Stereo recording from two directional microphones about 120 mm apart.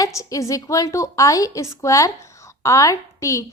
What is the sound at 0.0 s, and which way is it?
A woman's voice, 25° left (ahead or behind).